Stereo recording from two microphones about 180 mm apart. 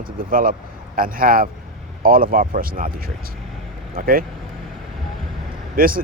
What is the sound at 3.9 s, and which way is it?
Speech, 55° right (ahead or behind).